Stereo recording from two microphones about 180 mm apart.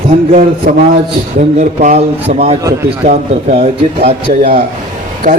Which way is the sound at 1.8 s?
40° right (ahead or behind).